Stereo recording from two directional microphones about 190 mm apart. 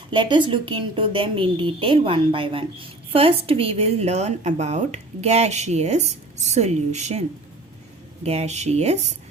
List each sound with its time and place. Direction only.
0.1 s a woman's voice: 25° right (ahead or behind)